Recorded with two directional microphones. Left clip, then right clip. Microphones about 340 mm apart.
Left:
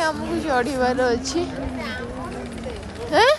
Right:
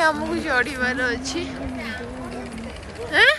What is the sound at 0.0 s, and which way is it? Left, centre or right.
Speech, centre.